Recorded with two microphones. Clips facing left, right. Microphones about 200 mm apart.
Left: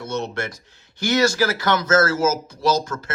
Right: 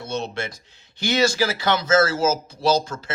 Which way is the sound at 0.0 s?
30° right (ahead or behind).